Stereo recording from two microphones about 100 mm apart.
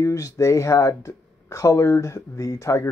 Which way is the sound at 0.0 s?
30° left (ahead or behind).